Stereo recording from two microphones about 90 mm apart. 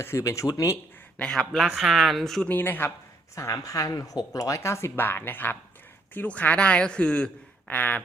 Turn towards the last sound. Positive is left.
turn(degrees=20)  # may be behind; listen again after turning